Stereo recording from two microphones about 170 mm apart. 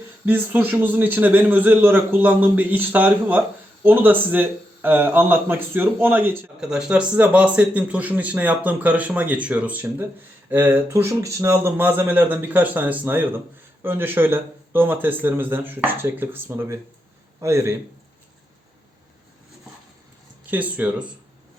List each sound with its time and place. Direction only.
0.3 s speech: 10° right (ahead or behind)
20.5 s speech: 10° right (ahead or behind)